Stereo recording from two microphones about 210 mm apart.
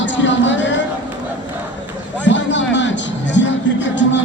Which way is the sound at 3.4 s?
55° left (ahead or behind).